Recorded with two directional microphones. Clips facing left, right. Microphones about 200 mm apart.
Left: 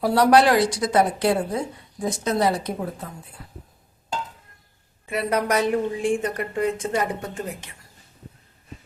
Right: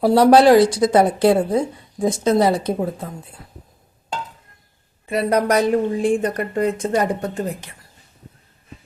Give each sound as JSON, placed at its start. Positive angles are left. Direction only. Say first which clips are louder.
{"t": 0.0, "sound": "speech", "louder": "right 5 dB", "side_deg": -25}
{"t": 5.0, "sound": "a woman's voice", "louder": "right 5 dB", "side_deg": -35}